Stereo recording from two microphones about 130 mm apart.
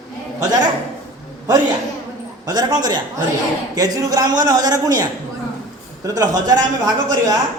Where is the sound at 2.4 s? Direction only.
30° right (ahead or behind).